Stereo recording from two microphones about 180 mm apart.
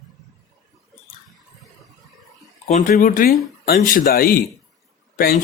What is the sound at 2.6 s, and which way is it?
Speech, 45° left (ahead or behind).